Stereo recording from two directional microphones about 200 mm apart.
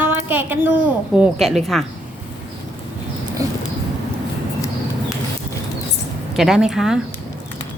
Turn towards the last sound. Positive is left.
turn(degrees=-5)  # may be behind; listen again after turning